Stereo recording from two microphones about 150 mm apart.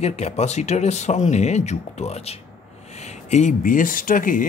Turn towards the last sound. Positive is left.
turn(degrees=65)  # may be behind; listen again after turning